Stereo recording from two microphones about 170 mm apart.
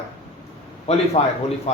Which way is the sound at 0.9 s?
40° left (ahead or behind).